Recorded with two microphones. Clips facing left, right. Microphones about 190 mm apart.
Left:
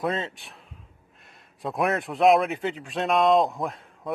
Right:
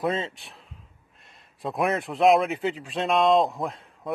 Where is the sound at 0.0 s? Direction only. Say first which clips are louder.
Right 1 dB; centre (ahead or behind).